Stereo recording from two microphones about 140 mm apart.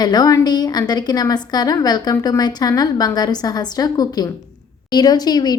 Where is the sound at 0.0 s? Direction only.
30° left (ahead or behind).